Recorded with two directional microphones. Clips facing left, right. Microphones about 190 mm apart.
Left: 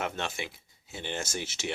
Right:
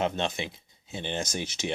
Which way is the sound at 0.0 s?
20° right (ahead or behind).